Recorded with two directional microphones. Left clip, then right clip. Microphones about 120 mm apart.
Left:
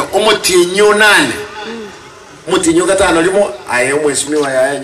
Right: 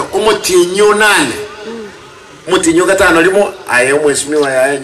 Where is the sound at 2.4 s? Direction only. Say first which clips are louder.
Right 1 dB; 25° right (ahead or behind).